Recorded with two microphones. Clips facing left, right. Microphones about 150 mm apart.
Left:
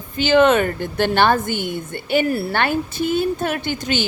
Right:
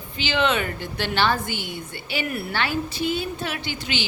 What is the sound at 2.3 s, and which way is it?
Speech, 35° left (ahead or behind).